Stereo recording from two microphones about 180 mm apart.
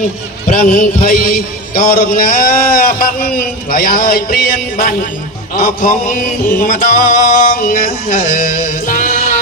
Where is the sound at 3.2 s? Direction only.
55° left (ahead or behind).